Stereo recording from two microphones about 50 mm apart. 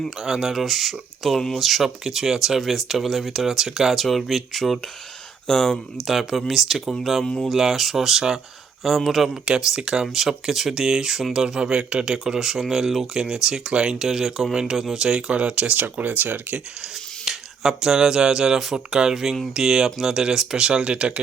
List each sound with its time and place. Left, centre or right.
0.2 s speech: centre
6.1 s speech: centre; by 16.6 s right
17.2 s speech: centre